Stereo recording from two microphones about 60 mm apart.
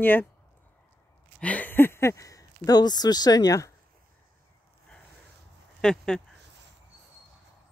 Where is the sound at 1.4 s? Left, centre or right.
Left.